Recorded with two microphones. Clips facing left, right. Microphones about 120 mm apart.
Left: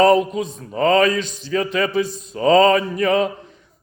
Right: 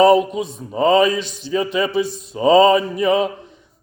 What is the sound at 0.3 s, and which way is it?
A man's voice, 15° right (ahead or behind).